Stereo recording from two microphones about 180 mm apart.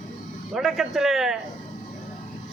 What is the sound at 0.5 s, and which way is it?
Speech, centre (ahead or behind).